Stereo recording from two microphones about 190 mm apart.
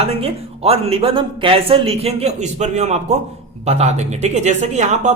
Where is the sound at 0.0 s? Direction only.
30° right (ahead or behind).